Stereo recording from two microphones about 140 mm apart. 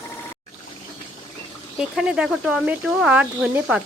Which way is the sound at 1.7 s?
5° right (ahead or behind).